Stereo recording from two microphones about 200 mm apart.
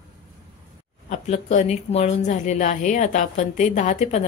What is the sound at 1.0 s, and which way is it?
Speech, 35° left (ahead or behind).